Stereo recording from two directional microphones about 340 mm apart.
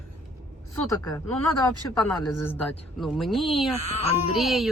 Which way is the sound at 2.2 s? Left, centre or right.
Centre.